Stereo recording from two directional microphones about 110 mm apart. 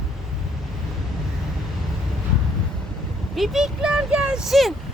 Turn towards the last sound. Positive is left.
turn(degrees=0)  # may be behind; listen again after turning